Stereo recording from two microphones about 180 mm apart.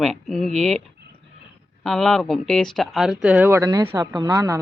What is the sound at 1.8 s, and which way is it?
Speech, centre (ahead or behind).